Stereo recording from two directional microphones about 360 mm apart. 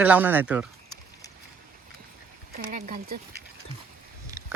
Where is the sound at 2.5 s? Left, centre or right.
Right.